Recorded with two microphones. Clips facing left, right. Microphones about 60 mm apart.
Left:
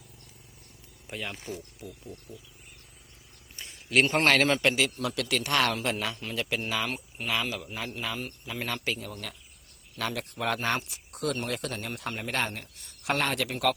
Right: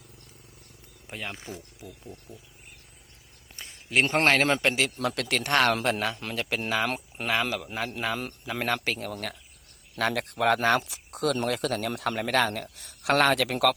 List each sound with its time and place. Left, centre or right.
1.1 s a man's voice: right
3.6 s a sound: right
4.1 s a man's voice: right
5.0 s a man's voice: right
6.8 s speech: right
7.5 s a man's voice: right
8.0 s a man's voice: right
8.6 s a man's voice: right